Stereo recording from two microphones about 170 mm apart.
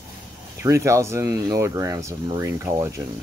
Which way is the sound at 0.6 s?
15° right (ahead or behind).